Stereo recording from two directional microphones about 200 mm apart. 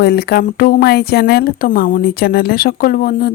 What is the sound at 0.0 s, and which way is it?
Speech, 50° left (ahead or behind).